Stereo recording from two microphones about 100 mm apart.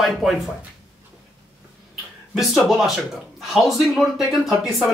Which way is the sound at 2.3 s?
Centre (ahead or behind).